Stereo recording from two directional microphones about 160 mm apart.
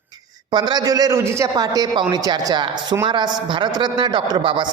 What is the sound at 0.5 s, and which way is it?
A man's voice, 25° right (ahead or behind).